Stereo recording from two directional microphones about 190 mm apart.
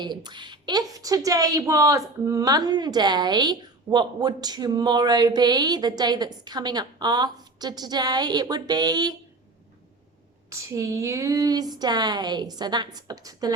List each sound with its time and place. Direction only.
0.0 s a woman's voice: 25° right (ahead or behind)
10.5 s a woman's voice: 15° right (ahead or behind)